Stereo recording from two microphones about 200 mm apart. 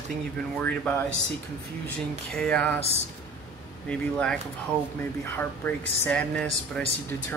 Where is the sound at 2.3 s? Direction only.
5° left (ahead or behind).